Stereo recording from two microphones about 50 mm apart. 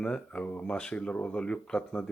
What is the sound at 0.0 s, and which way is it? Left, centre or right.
Speech, left.